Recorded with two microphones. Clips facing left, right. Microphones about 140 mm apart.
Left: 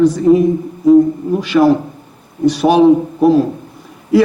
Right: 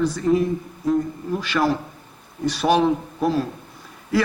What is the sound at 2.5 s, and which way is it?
Speech, 10° left (ahead or behind).